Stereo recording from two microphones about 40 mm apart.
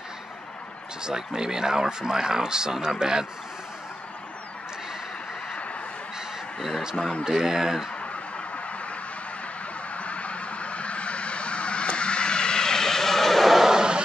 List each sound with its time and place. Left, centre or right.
1.0 s speech: centre
7.2 s speech: centre
9.9 s vehicle: left; by 14.0 s centre